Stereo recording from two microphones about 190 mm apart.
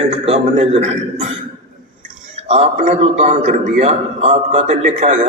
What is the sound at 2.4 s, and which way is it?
A man's voice, 35° right (ahead or behind).